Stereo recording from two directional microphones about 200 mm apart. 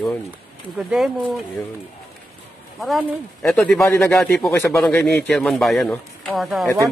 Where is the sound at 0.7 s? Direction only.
Centre (ahead or behind).